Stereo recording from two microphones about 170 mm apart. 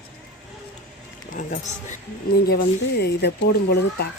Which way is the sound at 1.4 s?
45° left (ahead or behind).